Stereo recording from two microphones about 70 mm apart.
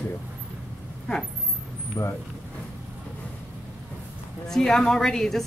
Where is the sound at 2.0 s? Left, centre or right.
Left.